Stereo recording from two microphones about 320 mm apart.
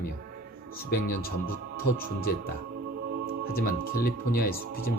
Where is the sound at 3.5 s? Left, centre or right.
Left.